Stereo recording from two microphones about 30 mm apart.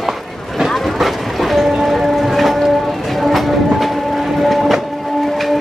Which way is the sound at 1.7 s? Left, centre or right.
Centre.